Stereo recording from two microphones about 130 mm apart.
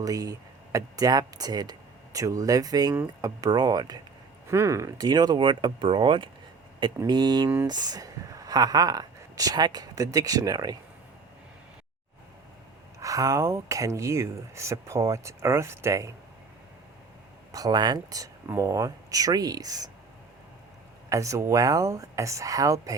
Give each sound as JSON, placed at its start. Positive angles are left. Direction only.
{"t": 0.0, "sound": "speech", "side_deg": -30}
{"t": 13.0, "sound": "speech", "side_deg": -25}
{"t": 17.5, "sound": "speech", "side_deg": -30}
{"t": 21.1, "sound": "speech", "side_deg": -25}